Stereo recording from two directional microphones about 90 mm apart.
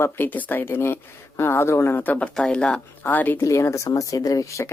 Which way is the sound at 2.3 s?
10° left (ahead or behind).